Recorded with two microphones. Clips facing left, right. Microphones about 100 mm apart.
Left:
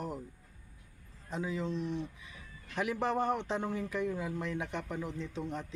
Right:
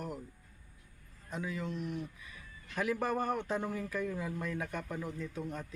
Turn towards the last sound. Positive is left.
turn(degrees=25)  # may be behind; listen again after turning